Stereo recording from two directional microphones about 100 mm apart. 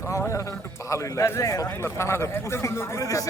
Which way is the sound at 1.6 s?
25° left (ahead or behind).